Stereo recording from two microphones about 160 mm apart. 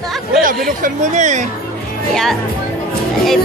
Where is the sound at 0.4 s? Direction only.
60° right (ahead or behind).